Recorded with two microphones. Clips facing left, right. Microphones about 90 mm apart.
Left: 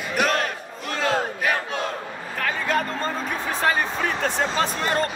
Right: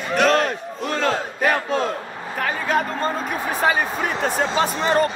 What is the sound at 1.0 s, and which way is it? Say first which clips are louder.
Battle cry: right 1 dB; 40° right (ahead or behind).